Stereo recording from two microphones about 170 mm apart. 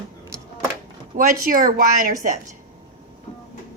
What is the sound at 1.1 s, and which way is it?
Speech, 50° right (ahead or behind).